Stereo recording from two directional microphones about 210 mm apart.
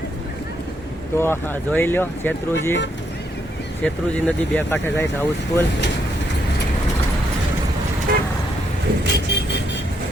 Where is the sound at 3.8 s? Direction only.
5° left (ahead or behind).